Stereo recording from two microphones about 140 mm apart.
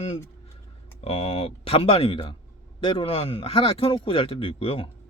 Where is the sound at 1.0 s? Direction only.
45° left (ahead or behind).